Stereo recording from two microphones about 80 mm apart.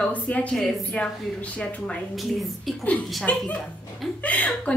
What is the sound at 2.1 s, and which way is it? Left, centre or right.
Speech, centre.